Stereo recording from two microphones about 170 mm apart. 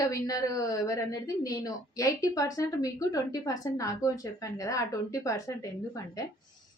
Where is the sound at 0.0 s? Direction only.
20° left (ahead or behind).